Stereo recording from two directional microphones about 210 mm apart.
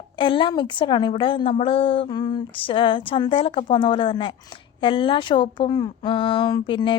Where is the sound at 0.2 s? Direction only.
25° left (ahead or behind).